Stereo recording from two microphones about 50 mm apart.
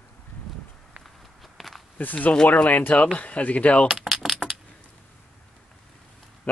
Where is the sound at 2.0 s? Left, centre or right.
Left.